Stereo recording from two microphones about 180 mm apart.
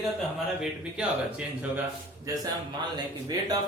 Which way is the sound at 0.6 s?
5° right (ahead or behind).